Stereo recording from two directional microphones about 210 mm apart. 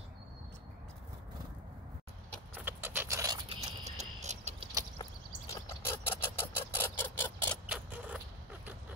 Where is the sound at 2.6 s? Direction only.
10° right (ahead or behind).